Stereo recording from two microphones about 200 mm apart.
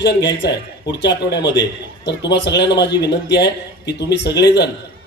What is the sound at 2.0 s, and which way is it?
Speech, 60° left (ahead or behind).